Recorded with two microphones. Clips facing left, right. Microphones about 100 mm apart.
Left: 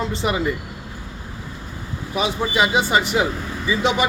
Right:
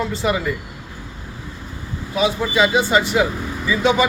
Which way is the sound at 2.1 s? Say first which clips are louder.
Right 3 dB; 20° left (ahead or behind).